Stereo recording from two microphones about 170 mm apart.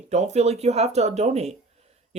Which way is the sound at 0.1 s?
40° right (ahead or behind).